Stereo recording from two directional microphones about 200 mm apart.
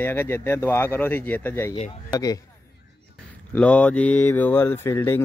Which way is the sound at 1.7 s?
20° left (ahead or behind).